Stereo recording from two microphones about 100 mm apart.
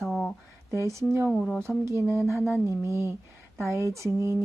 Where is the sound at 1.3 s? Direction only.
5° left (ahead or behind).